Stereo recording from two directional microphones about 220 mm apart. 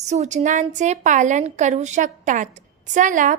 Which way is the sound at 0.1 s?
30° right (ahead or behind).